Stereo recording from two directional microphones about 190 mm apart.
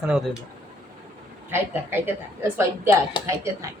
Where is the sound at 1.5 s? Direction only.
10° right (ahead or behind).